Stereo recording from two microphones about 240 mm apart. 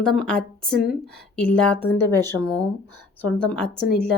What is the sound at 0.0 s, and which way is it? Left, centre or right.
A woman's voice, centre.